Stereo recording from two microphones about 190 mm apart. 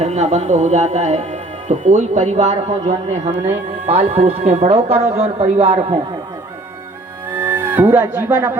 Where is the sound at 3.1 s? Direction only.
15° right (ahead or behind).